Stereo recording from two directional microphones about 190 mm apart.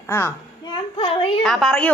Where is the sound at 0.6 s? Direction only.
25° left (ahead or behind).